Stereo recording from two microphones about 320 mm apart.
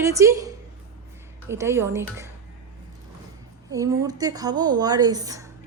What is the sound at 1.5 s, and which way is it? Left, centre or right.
Speech, centre.